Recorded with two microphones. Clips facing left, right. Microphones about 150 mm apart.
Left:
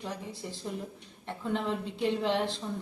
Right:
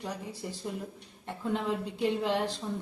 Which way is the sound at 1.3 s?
5° right (ahead or behind).